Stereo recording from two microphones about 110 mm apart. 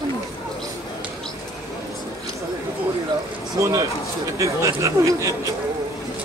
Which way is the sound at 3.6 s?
25° right (ahead or behind).